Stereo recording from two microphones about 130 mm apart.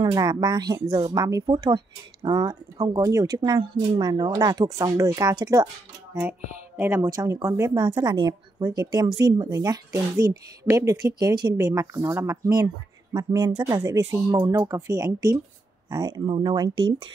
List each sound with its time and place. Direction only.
0.0 s a woman's voice: 30° right (ahead or behind)
6.8 s speech: 15° right (ahead or behind)
7.1 s a woman's voice: 30° right (ahead or behind)